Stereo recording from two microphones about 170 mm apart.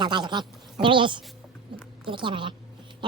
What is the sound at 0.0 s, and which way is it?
Speech, 25° right (ahead or behind).